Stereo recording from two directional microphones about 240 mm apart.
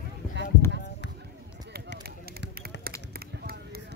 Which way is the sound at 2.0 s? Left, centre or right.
Right.